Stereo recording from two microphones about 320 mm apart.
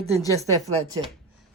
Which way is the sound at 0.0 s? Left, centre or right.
Centre.